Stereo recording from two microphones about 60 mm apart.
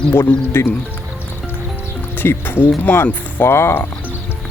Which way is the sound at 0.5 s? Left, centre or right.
Left.